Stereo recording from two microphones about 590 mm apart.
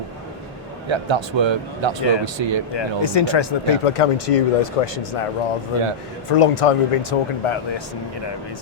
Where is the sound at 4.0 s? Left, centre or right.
Left.